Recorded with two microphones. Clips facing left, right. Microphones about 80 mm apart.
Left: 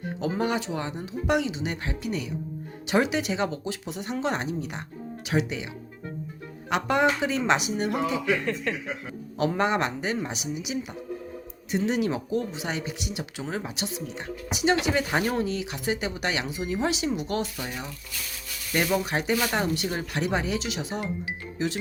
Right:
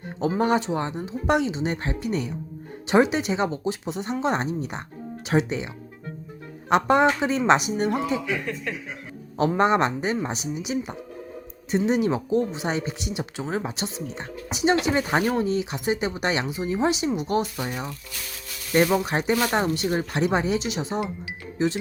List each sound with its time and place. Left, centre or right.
0.3 s speech: right
8.3 s speech: centre
9.6 s speech: right